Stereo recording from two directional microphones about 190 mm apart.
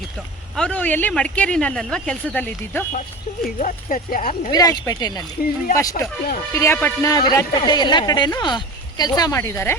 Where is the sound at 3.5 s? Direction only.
45° left (ahead or behind).